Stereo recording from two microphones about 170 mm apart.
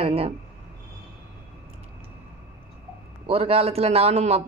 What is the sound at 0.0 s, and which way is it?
Speech, 35° right (ahead or behind).